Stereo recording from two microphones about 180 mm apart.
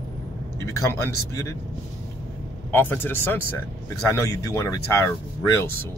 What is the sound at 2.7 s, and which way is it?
Speech, 10° left (ahead or behind).